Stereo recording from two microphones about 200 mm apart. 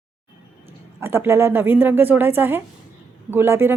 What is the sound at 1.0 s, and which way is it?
A woman's voice, 10° right (ahead or behind).